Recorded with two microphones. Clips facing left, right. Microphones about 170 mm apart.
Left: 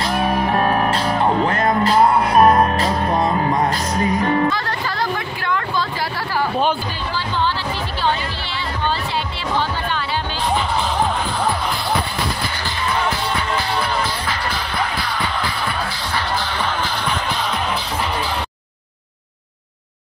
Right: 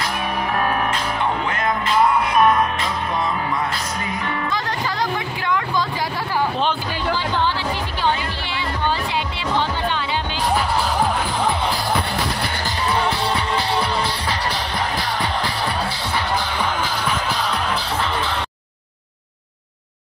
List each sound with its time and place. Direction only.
0.0 s music: 40° left (ahead or behind)
12.8 s music: 30° right (ahead or behind)
16.6 s music: 5° right (ahead or behind)